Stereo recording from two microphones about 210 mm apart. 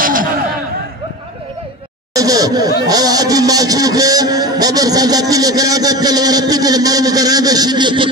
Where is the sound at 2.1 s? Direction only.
15° right (ahead or behind).